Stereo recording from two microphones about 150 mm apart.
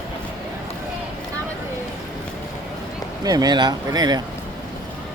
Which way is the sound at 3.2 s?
25° right (ahead or behind).